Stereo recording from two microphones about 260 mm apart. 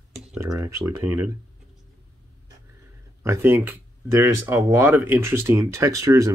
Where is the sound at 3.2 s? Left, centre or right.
Centre.